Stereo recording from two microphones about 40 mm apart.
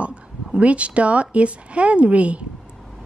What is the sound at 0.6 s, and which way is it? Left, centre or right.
A woman's voice, right.